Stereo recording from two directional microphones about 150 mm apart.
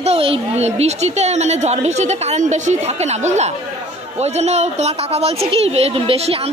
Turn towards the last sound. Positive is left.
turn(degrees=-40)  # may be behind; listen again after turning